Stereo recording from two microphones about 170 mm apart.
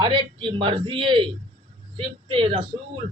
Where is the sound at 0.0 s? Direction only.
30° right (ahead or behind).